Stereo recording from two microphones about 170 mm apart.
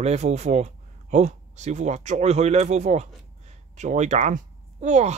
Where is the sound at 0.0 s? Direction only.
40° right (ahead or behind).